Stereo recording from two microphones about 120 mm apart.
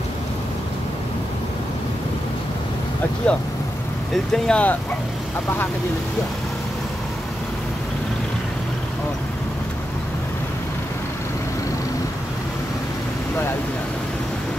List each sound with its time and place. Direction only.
3.3 s speech: 10° left (ahead or behind)